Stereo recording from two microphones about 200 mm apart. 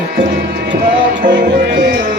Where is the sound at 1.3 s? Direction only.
60° right (ahead or behind).